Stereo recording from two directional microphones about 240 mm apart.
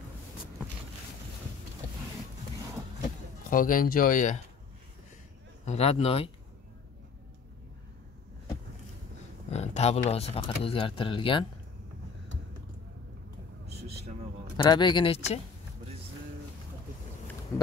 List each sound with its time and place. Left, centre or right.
3.4 s speech: left
5.7 s speech: left
9.5 s speech: left
14.6 s speech: centre